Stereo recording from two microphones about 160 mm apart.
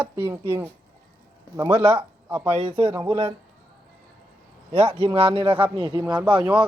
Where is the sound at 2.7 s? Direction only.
20° right (ahead or behind).